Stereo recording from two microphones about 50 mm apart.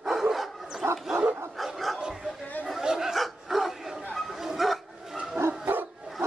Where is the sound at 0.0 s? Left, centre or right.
Centre.